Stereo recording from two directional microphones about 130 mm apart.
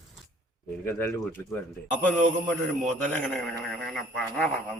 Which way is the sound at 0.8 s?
15° left (ahead or behind).